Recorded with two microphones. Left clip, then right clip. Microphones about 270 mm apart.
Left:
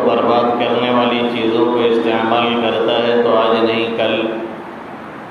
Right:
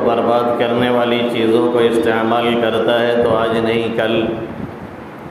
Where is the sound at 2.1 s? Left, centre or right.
Right.